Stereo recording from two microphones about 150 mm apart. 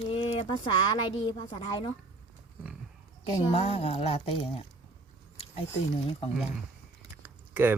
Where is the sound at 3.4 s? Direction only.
40° left (ahead or behind).